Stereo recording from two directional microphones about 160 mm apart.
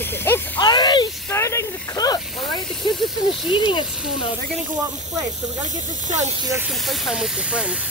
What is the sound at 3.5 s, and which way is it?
Speech, 30° left (ahead or behind).